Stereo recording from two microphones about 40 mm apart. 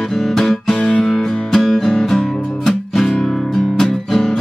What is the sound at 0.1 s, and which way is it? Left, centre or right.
Music, centre.